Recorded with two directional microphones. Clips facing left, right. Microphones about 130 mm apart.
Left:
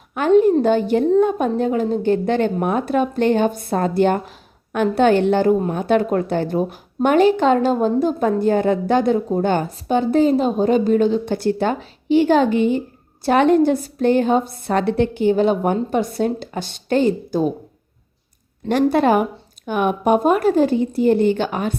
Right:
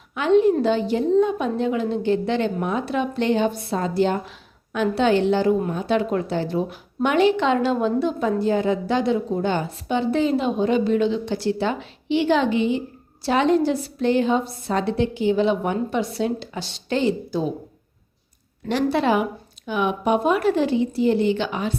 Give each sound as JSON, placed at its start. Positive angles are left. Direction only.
{"t": 0.1, "sound": "a woman's voice", "side_deg": 45}
{"t": 18.7, "sound": "a woman's voice", "side_deg": 50}